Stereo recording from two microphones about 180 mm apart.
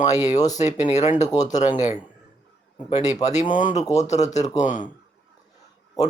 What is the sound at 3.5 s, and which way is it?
Speech, 45° left (ahead or behind).